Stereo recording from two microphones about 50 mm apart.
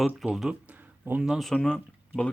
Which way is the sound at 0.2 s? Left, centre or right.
Centre.